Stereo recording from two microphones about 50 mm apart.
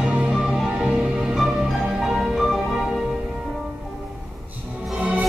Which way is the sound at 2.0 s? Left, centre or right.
Centre.